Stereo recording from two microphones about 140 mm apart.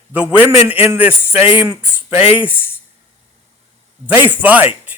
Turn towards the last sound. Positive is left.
turn(degrees=-10)  # may be behind; listen again after turning